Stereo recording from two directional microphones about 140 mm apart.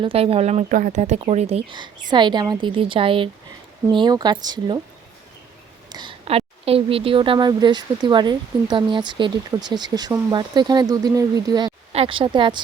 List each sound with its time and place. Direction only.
0.0 s speech: 40° right (ahead or behind)
0.7 s speech: 70° right (ahead or behind); by 1.7 s 50° right (ahead or behind)
2.0 s speech: 30° right (ahead or behind)
5.9 s a sound: 30° right (ahead or behind)
6.2 s speech: 45° right (ahead or behind); by 11.7 s 30° right (ahead or behind)
11.9 s speech: 45° right (ahead or behind)